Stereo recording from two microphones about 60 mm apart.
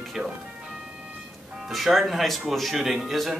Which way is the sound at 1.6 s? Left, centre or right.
Centre.